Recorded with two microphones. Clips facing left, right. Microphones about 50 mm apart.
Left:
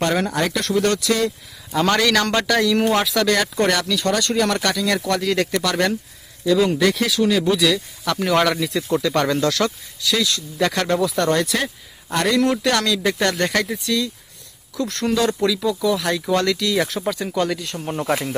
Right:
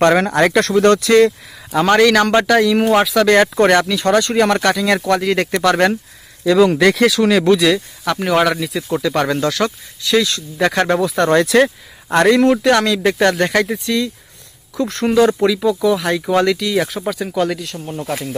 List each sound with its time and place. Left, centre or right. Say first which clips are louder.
0.0 s speech: right 8 dB; right
1.8 s speech: right 6 dB; centre
3.2 s speech: right 7 dB; right
5.0 s speech: right 4 dB; right
6.4 s speech: right 5 dB; right
7.1 s speech: right 5 dB; right
8.0 s speech: right 3 dB; centre
10.0 s speech: right 5 dB; right
12.5 s speech: right 6 dB; right
13.4 s speech: right 5 dB; centre
13.8 s speech: right 3 dB; right; by 17.7 s centre
17.8 s speech: left 2 dB; left